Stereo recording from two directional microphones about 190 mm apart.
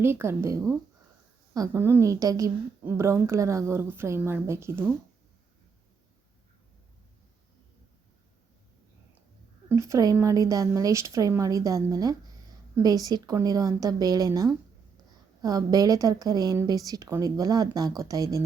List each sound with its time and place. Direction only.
0.0 s a woman's voice: 15° right (ahead or behind)
9.6 s a woman's voice: 15° right (ahead or behind)